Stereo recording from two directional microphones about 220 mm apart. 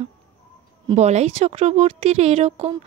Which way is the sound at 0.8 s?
30° right (ahead or behind).